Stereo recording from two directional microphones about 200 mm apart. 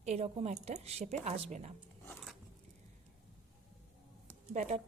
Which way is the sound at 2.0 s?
5° left (ahead or behind).